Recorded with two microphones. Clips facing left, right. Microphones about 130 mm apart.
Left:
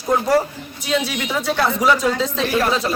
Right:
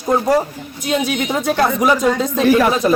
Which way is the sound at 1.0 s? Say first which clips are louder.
Right 4 dB; 50° right (ahead or behind).